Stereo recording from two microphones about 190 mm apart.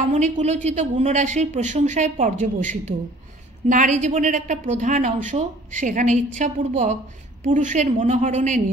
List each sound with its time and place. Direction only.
0.1 s a woman's voice: 35° right (ahead or behind)